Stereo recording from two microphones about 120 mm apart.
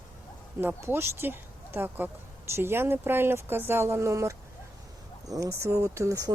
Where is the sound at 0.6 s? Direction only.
15° right (ahead or behind).